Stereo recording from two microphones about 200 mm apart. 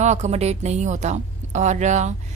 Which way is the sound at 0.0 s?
35° right (ahead or behind).